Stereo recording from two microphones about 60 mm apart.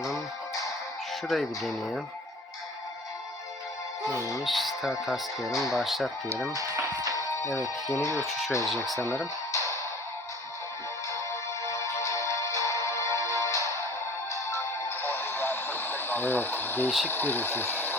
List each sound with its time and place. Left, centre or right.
1.3 s speech: centre
4.4 s speech: centre
6.5 s speech: right
7.2 s speech: left
8.3 s speech: centre
9.0 s speech: left
11.6 s music: left
14.8 s a sound: left
17.1 s speech: left